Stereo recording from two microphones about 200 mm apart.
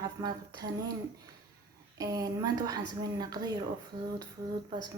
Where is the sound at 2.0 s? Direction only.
20° right (ahead or behind).